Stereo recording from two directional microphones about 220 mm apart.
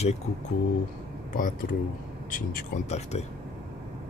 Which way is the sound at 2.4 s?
35° left (ahead or behind).